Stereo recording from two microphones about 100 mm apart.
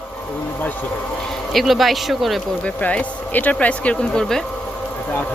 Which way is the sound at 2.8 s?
15° left (ahead or behind).